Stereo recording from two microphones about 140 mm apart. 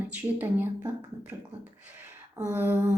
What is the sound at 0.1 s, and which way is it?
Speech, 15° right (ahead or behind).